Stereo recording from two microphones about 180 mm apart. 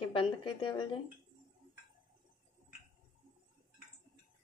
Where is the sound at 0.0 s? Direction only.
30° left (ahead or behind).